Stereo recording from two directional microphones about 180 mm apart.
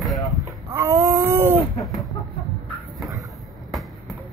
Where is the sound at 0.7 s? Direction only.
15° right (ahead or behind).